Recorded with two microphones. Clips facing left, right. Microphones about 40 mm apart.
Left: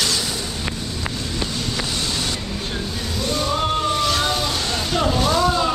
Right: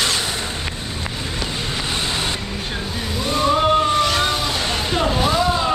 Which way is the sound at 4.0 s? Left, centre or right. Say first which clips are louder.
Right 2 dB; centre.